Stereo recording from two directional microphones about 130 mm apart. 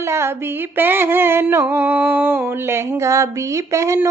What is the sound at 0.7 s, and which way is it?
Mantra, 15° right (ahead or behind).